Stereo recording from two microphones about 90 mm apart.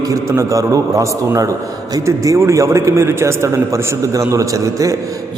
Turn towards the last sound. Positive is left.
turn(degrees=-35)  # may be behind; listen again after turning